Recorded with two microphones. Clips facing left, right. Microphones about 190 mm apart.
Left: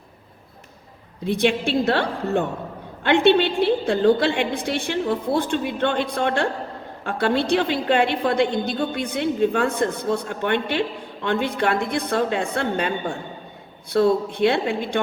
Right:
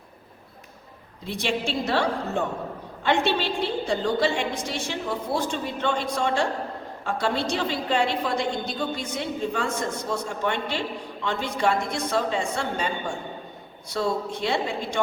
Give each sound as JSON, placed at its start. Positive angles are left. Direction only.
{"t": 1.2, "sound": "a woman's voice", "side_deg": 60}